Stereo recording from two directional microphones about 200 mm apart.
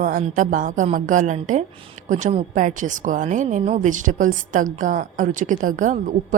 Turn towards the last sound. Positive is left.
turn(degrees=-40)  # may be behind; listen again after turning